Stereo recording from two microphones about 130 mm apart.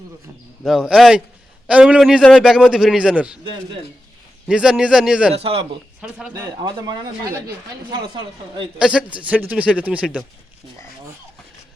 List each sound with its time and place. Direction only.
0.6 s a man's voice: 5° right (ahead or behind)
4.4 s a man's voice: 5° right (ahead or behind)
5.3 s speech: 45° right (ahead or behind)
6.0 s speech: 5° right (ahead or behind)
6.6 s speech: 35° right (ahead or behind)
8.8 s speech: 5° right (ahead or behind)